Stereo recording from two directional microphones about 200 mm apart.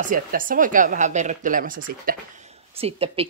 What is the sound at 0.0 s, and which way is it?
Speech, 40° right (ahead or behind).